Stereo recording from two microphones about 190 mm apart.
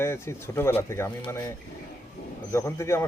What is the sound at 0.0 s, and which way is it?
Speech, 15° left (ahead or behind).